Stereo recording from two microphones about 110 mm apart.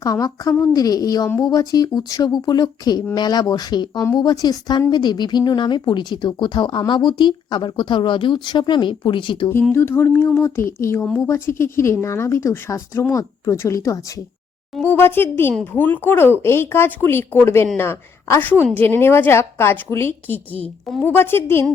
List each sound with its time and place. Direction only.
0.0 s speech: 35° left (ahead or behind)
9.7 s speech: 25° left (ahead or behind)